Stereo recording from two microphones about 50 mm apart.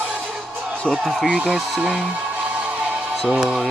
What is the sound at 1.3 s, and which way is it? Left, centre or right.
Speech, centre.